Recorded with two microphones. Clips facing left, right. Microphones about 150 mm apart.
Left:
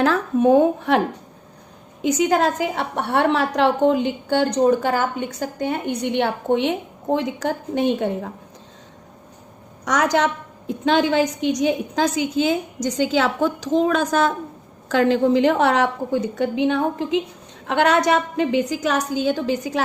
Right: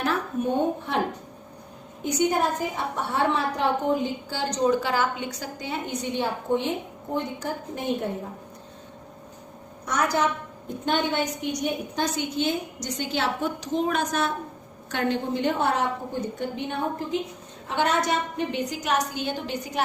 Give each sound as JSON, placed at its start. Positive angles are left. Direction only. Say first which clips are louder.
{"t": 0.0, "sound": "a woman's voice", "louder": "left 9 dB", "side_deg": 90}
{"t": 2.0, "sound": "a woman's voice", "louder": "left 5 dB", "side_deg": 90}
{"t": 9.8, "sound": "a woman's voice", "louder": "left 5 dB", "side_deg": 90}
{"t": 17.7, "sound": "a woman's voice", "louder": "left 7 dB", "side_deg": 75}